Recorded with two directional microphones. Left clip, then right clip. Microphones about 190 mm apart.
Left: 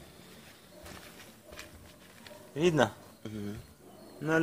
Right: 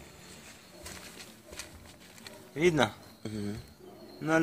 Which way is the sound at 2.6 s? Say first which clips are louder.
Even; 35° left (ahead or behind).